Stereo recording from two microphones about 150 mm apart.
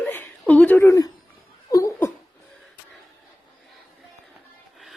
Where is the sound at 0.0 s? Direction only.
10° left (ahead or behind).